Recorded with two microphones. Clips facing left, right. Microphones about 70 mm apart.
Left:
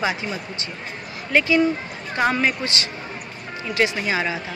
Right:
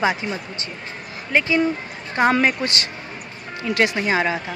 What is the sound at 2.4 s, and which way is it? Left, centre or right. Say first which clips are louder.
Speech: right 2 dB; right.